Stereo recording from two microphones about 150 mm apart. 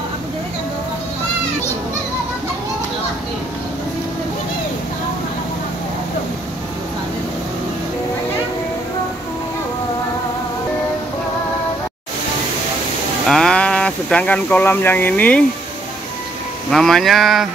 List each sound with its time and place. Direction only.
13.3 s speech: 5° left (ahead or behind)
16.7 s speech: centre (ahead or behind)